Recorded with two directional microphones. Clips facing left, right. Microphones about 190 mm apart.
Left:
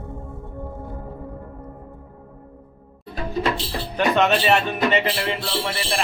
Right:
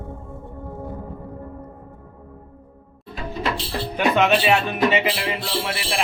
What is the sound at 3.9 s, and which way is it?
Speech, 5° right (ahead or behind).